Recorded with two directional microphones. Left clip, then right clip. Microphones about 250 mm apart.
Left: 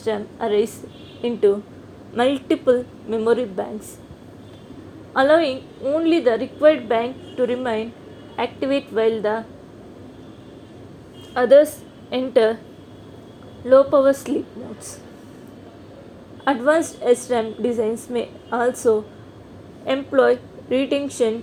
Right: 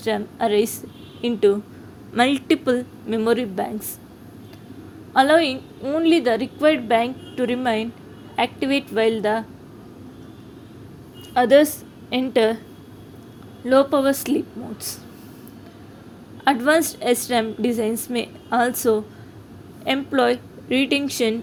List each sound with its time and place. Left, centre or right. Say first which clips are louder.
0.0 s a woman's voice: right 1 dB; right
5.1 s a woman's voice: even; right
11.3 s a woman's voice: left 2 dB; right
13.7 s a woman's voice: left 3 dB; right
16.4 s a woman's voice: even; right